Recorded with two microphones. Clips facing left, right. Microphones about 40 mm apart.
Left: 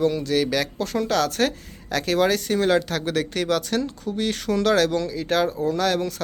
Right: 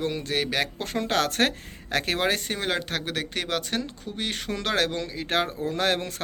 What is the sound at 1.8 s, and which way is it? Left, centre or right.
Speech, right.